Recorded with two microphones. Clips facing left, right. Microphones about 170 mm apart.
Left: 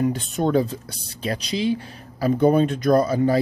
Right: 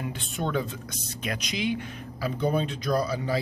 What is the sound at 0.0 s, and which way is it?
Speech, 40° left (ahead or behind).